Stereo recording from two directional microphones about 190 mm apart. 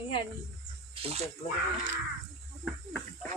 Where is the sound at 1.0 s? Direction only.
35° right (ahead or behind).